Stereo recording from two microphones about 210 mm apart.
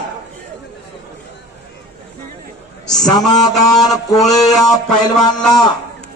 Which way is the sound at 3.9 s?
15° left (ahead or behind).